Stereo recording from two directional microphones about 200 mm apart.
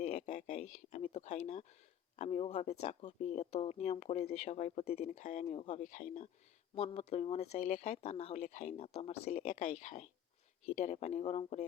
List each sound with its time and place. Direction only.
0.0 s speech: 35° left (ahead or behind)
6.7 s speech: 30° left (ahead or behind)